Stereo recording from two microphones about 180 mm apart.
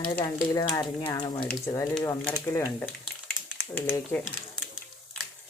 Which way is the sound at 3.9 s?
10° left (ahead or behind).